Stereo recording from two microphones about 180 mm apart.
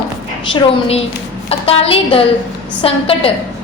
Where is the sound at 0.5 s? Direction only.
35° left (ahead or behind).